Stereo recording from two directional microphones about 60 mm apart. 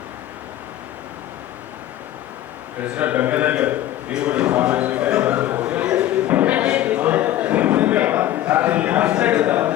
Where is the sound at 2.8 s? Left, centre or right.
Right.